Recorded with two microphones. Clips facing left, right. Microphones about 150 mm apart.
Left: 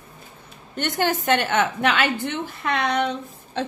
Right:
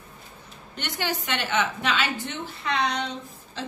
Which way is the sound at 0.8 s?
50° left (ahead or behind).